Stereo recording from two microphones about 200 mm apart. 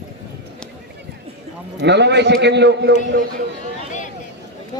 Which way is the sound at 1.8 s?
60° right (ahead or behind).